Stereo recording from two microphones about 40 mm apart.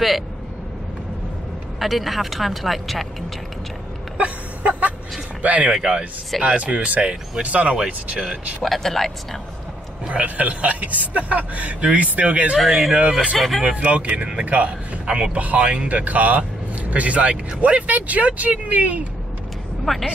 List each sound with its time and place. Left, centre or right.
1.8 s speech: centre
4.2 s a sound: right
5.4 s speech: right
5.7 s speech: centre
6.4 s speech: right
7.7 s speech: centre
8.6 s speech: centre
10.0 s speech: right
12.5 s speech: centre
13.7 s speech: right
15.3 s speech: right
19.8 s a woman's voice: centre